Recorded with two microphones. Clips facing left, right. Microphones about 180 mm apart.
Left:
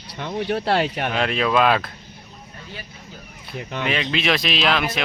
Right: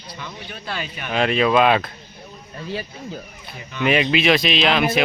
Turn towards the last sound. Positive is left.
turn(degrees=0)  # may be behind; listen again after turning